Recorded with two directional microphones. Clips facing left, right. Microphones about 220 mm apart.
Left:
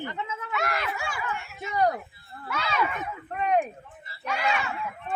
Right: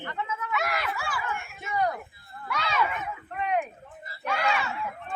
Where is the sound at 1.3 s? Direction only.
50° right (ahead or behind).